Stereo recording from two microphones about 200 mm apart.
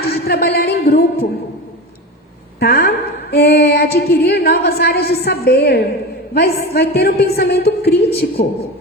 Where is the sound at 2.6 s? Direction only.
50° left (ahead or behind).